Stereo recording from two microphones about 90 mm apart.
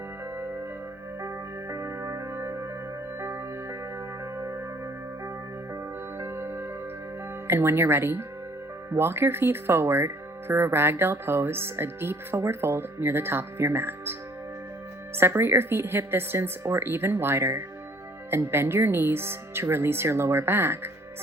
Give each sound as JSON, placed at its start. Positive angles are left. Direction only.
{"t": 1.7, "sound": "music", "side_deg": -30}
{"t": 6.1, "sound": "music", "side_deg": -25}
{"t": 7.4, "sound": "speech", "side_deg": -25}